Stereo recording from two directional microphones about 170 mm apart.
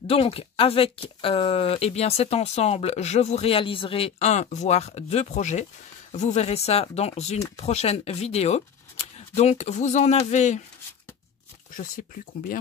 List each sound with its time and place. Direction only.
0.0 s speech: 35° left (ahead or behind)